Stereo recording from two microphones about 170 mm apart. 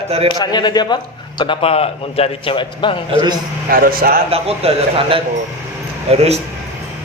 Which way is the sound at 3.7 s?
60° right (ahead or behind).